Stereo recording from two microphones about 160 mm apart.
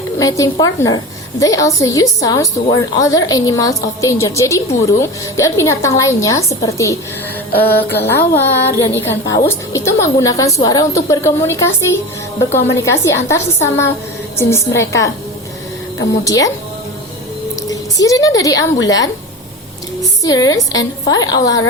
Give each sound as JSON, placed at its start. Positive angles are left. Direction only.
{"t": 0.2, "sound": "a woman's voice", "side_deg": 20}
{"t": 12.7, "sound": "a woman's voice", "side_deg": 15}
{"t": 16.2, "sound": "a woman's voice", "side_deg": 20}
{"t": 17.7, "sound": "speech", "side_deg": 20}
{"t": 20.2, "sound": "a woman's voice", "side_deg": 25}